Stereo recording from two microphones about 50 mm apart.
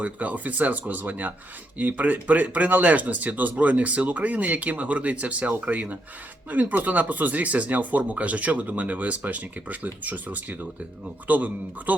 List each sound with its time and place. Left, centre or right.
0.0 s speech: right